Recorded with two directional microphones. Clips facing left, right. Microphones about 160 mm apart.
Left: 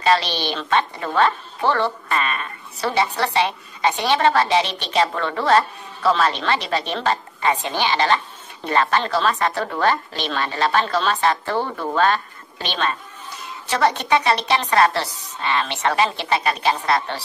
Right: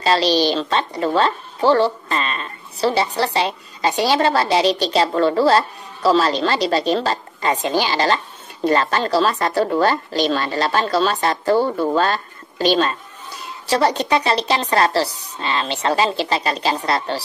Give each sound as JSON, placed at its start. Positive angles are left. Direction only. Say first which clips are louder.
{"t": 0.0, "sound": "a woman's voice", "louder": "right 3 dB", "side_deg": -35}